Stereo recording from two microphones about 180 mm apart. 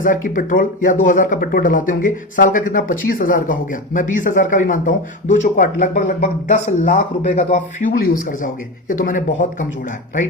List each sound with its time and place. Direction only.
0.0 s speech: 50° left (ahead or behind)